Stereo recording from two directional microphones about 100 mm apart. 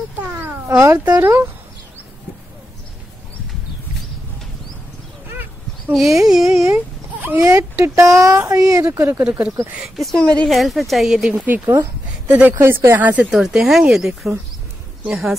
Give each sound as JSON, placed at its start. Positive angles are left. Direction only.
{"t": 0.2, "sound": "cat", "side_deg": -20}
{"t": 0.7, "sound": "speech", "side_deg": -30}
{"t": 5.3, "sound": "a sound", "side_deg": -20}
{"t": 6.2, "sound": "a woman's voice", "side_deg": -5}
{"t": 6.6, "sound": "a sound", "side_deg": -25}
{"t": 7.8, "sound": "speech", "side_deg": -30}
{"t": 9.9, "sound": "a woman's voice", "side_deg": 0}